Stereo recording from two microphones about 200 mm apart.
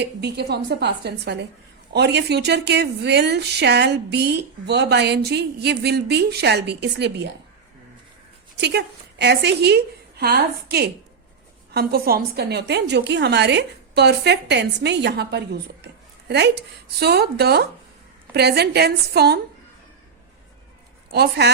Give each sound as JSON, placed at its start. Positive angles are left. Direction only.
{"t": 0.0, "sound": "a woman's voice", "side_deg": -55}
{"t": 8.6, "sound": "a woman's voice", "side_deg": -55}
{"t": 21.1, "sound": "a woman's voice", "side_deg": -55}